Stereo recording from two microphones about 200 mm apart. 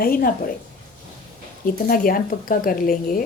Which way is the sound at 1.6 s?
45° left (ahead or behind).